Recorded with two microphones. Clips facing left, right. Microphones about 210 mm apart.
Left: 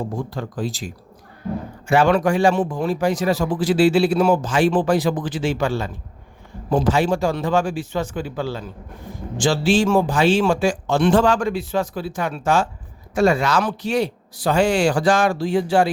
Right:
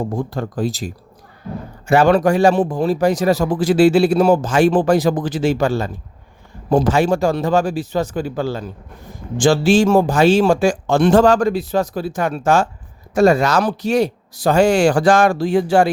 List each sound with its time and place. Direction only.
0.2 s a man's voice: 45° right (ahead or behind)